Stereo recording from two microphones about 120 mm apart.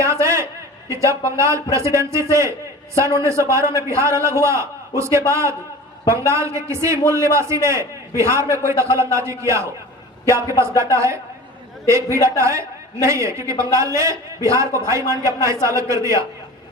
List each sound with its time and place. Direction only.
0.0 s a sound: 25° right (ahead or behind)
0.9 s a woman's voice: 25° right (ahead or behind)
12.4 s a woman's voice: 25° right (ahead or behind)